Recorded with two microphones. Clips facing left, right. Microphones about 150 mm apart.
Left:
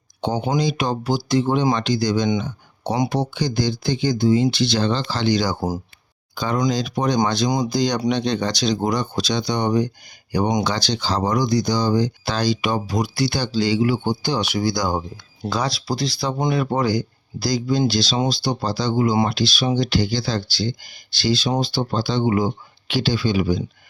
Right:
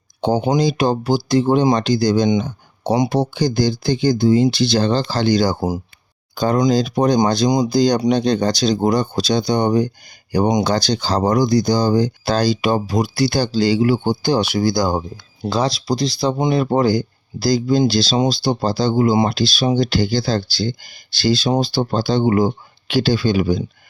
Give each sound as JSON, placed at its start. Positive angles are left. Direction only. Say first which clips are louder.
{"t": 0.2, "sound": "speech", "louder": "right 5 dB", "side_deg": -35}
{"t": 2.4, "sound": "a sound", "louder": "right 3 dB", "side_deg": -35}
{"t": 3.1, "sound": "speech", "louder": "right 4 dB", "side_deg": -35}
{"t": 5.5, "sound": "speech", "louder": "right 3 dB", "side_deg": -10}
{"t": 6.3, "sound": "speech", "louder": "right 6 dB", "side_deg": -35}
{"t": 16.7, "sound": "speech", "louder": "right 5 dB", "side_deg": -50}
{"t": 17.8, "sound": "speech", "louder": "right 4 dB", "side_deg": -35}
{"t": 18.6, "sound": "speech", "louder": "right 4 dB", "side_deg": -45}
{"t": 19.3, "sound": "speech", "louder": "right 3 dB", "side_deg": -35}